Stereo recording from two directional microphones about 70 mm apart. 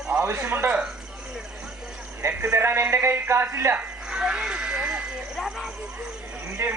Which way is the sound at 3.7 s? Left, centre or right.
Centre.